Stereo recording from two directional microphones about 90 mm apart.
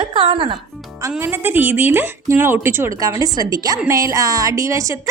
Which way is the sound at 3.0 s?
40° right (ahead or behind).